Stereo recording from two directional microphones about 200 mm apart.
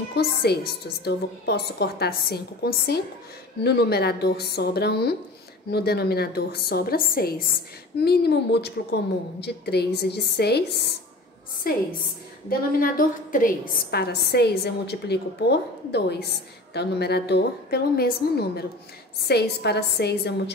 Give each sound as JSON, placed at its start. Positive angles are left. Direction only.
{"t": 0.2, "sound": "a woman's voice", "side_deg": 55}
{"t": 12.4, "sound": "a woman's voice", "side_deg": 45}